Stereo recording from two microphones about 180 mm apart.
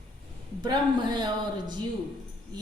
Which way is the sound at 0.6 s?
25° right (ahead or behind).